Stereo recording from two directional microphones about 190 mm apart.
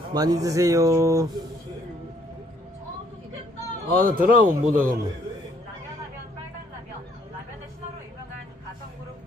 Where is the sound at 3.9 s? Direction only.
45° right (ahead or behind).